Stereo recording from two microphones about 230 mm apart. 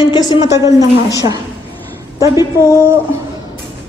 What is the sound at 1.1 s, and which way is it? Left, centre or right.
Speech, centre.